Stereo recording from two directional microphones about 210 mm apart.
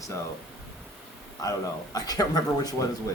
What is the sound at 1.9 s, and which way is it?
Speech, 20° left (ahead or behind).